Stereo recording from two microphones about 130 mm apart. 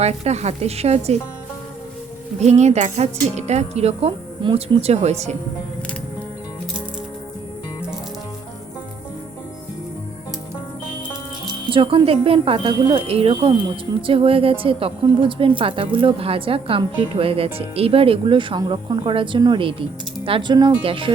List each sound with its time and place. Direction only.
0.0 s chink: 55° right (ahead or behind)
2.4 s chink: 60° right (ahead or behind)
4.4 s speech: 35° right (ahead or behind)
4.8 s speech: 55° right (ahead or behind)
11.7 s speech: 40° right (ahead or behind)